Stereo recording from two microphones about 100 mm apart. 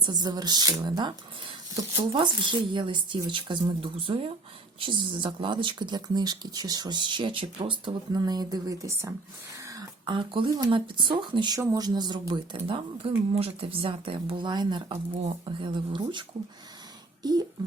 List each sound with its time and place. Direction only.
0.0 s speech: 40° right (ahead or behind); by 4.3 s 65° right (ahead or behind)
4.8 s speech: 55° right (ahead or behind)
8.2 s speech: 40° right (ahead or behind)
9.6 s throat clearing: 30° right (ahead or behind)
10.1 s speech: 60° right (ahead or behind)
12.3 s speech: 60° right (ahead or behind)